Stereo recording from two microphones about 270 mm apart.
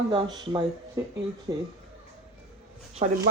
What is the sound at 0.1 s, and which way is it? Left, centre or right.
Speech, centre.